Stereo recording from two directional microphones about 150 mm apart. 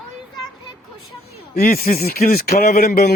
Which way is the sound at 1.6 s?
70° left (ahead or behind).